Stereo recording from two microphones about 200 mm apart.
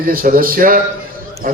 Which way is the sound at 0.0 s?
45° right (ahead or behind).